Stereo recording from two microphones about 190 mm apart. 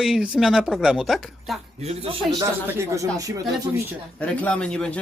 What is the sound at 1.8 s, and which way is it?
Speech, 30° right (ahead or behind).